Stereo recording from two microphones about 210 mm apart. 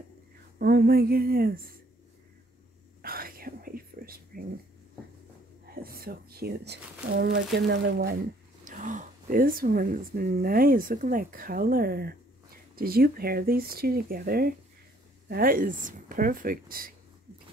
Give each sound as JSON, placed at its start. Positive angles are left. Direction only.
{"t": 0.6, "sound": "speech", "side_deg": -45}
{"t": 3.0, "sound": "whispering", "side_deg": -45}
{"t": 5.8, "sound": "speech", "side_deg": -45}
{"t": 8.6, "sound": "speech", "side_deg": -35}